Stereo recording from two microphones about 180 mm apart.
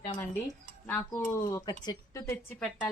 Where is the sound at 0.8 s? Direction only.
15° left (ahead or behind).